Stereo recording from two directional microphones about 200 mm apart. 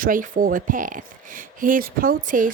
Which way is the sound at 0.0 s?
45° right (ahead or behind).